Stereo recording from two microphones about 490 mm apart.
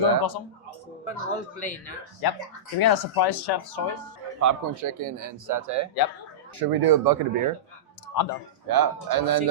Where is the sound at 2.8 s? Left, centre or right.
Left.